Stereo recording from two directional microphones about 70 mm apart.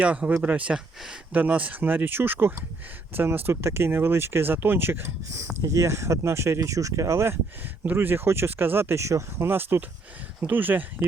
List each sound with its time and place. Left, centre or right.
0.0 s speech: centre; by 5.1 s right
5.6 s speech: right
7.9 s speech: right